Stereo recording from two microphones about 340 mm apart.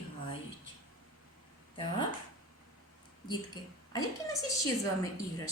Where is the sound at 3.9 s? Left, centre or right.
Centre.